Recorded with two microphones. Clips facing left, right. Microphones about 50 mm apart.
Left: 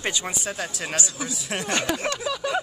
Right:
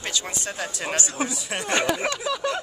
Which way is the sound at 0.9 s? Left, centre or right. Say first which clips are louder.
Right 3 dB; right.